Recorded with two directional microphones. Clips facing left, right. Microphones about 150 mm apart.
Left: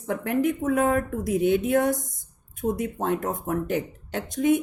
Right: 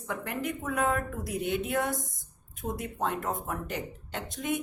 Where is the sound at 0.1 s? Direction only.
45° left (ahead or behind).